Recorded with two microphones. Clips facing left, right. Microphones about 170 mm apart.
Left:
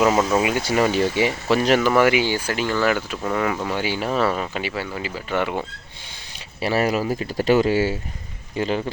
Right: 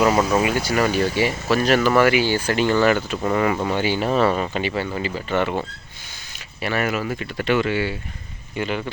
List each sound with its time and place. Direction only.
0.2 s speech: 5° right (ahead or behind)
0.6 s speech: 20° left (ahead or behind)
2.5 s speech: 5° left (ahead or behind)
3.8 s speech: 5° left (ahead or behind)
6.6 s speech: 30° left (ahead or behind)